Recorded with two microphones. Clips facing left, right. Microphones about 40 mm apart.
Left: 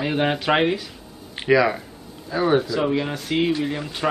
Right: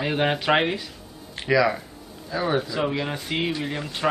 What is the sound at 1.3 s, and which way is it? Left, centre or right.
Speech, centre.